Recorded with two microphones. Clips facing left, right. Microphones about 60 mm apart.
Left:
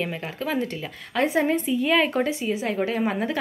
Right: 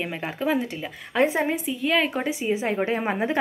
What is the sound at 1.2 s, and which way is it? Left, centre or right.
Speech, right.